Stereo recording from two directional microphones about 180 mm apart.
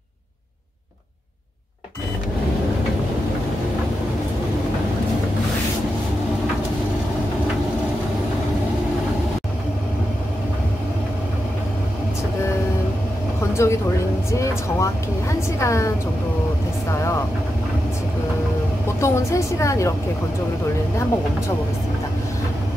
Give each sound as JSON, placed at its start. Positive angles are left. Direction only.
{"t": 13.6, "sound": "speech", "side_deg": 15}
{"t": 18.9, "sound": "speech", "side_deg": 15}